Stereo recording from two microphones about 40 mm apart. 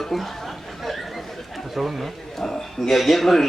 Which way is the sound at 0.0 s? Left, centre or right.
Centre.